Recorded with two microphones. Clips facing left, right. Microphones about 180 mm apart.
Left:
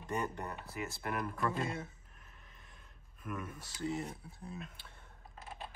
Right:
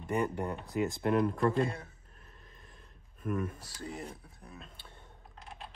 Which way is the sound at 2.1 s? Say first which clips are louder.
Right 4 dB; 40° right (ahead or behind).